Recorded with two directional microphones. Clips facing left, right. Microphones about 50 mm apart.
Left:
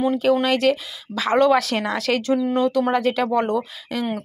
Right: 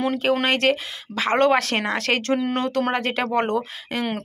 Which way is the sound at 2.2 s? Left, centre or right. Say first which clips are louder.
Left 3 dB; right.